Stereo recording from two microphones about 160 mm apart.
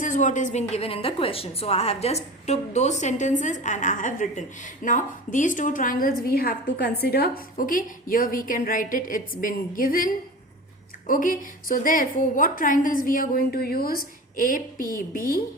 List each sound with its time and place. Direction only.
0.0 s a woman's voice: 50° left (ahead or behind)
0.7 s a woman's voice: 40° left (ahead or behind); by 7.4 s 75° left (ahead or behind)
7.5 s a woman's voice: 60° left (ahead or behind)